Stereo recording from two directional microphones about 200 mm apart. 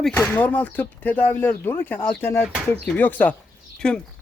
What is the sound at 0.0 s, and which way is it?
A man's voice, 5° left (ahead or behind).